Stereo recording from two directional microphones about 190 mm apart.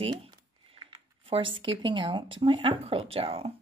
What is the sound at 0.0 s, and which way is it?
Speech, 30° right (ahead or behind).